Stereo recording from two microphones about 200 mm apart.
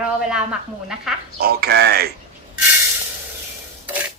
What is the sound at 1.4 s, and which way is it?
Speech, 50° right (ahead or behind).